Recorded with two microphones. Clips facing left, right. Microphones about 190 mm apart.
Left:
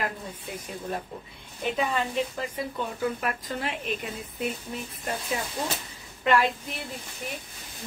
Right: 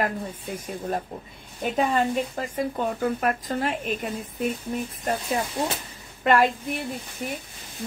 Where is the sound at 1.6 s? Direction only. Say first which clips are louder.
Right 4 dB; 45° right (ahead or behind).